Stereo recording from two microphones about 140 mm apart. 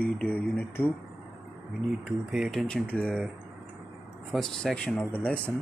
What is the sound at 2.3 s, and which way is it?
Speech, centre (ahead or behind).